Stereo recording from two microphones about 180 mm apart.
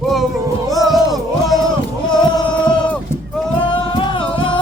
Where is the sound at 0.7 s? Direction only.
Centre (ahead or behind).